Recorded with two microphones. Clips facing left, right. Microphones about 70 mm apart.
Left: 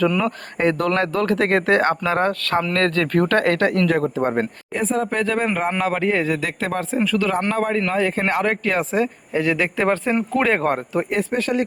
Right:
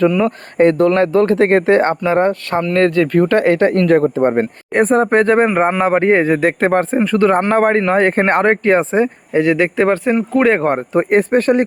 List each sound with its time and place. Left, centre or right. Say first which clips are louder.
0.2 s speech: right 8 dB; right
3.7 s speech: right 7 dB; right
4.7 s speech: right 11 dB; right
10.1 s speech: right 6 dB; centre
10.9 s speech: right 9 dB; right